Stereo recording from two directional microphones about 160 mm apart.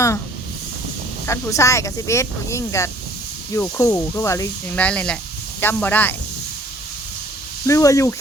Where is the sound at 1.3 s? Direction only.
20° left (ahead or behind).